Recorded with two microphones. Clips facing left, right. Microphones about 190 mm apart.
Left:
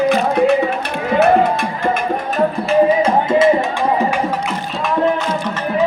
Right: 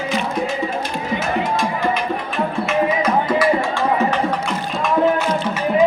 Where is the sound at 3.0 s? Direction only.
30° left (ahead or behind).